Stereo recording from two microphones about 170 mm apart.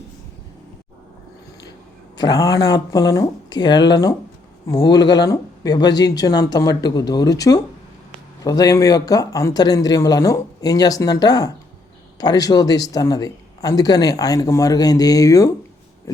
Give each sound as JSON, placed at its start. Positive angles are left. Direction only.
{"t": 2.1, "sound": "a man's voice", "side_deg": 20}
{"t": 8.4, "sound": "a man's voice", "side_deg": 20}